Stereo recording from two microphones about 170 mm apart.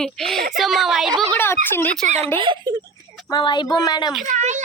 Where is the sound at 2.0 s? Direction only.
40° right (ahead or behind).